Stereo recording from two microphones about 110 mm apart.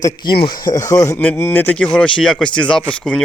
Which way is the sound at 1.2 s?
15° left (ahead or behind).